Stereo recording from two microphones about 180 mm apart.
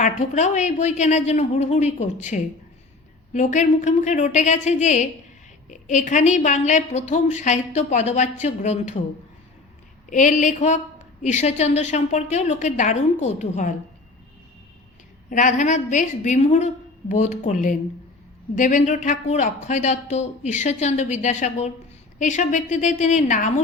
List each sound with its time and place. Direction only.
0.0 s a woman's voice: 40° left (ahead or behind)
10.1 s a woman's voice: 45° left (ahead or behind)
15.3 s a woman's voice: 45° left (ahead or behind)